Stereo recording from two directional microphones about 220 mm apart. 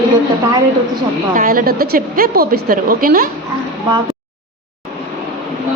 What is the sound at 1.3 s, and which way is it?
A woman's voice, 40° right (ahead or behind).